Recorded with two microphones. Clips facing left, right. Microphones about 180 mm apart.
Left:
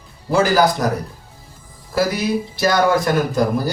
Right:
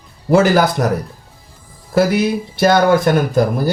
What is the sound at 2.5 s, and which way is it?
Speech, 60° right (ahead or behind).